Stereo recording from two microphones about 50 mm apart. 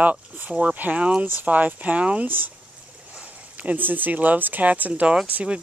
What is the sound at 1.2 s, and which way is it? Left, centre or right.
Speech, right.